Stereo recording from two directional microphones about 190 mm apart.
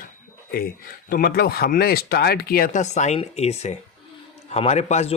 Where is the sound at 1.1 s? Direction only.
50° left (ahead or behind).